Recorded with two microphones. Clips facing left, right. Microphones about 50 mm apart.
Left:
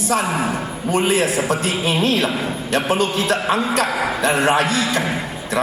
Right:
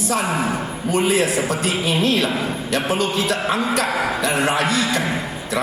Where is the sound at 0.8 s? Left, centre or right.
Left.